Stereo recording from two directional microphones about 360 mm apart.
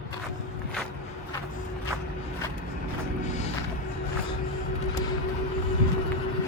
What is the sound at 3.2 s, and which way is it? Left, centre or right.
Music, centre.